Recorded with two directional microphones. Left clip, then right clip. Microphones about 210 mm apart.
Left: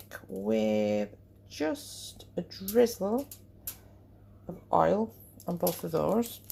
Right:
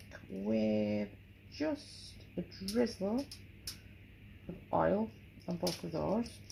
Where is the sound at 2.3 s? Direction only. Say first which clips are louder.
Left 10 dB; 35° left (ahead or behind).